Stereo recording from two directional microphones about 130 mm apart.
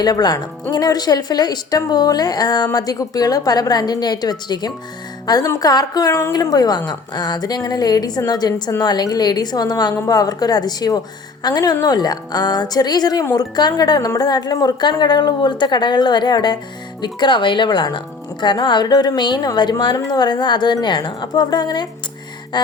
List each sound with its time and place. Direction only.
0.0 s a woman's voice: 30° left (ahead or behind)